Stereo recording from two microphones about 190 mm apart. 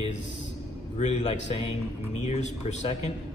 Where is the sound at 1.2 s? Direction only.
30° left (ahead or behind).